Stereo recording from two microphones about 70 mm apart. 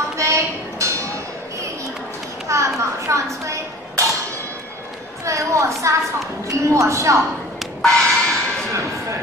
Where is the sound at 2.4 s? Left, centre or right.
Right.